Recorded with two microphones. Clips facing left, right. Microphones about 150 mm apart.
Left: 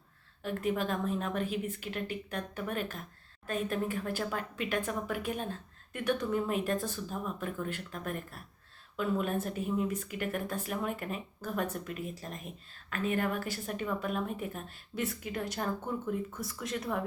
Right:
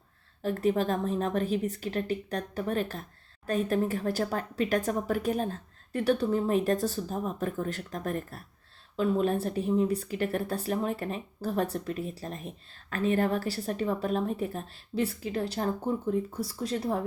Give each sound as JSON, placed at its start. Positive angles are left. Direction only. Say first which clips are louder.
{"t": 0.4, "sound": "speech", "louder": "right 5 dB", "side_deg": -35}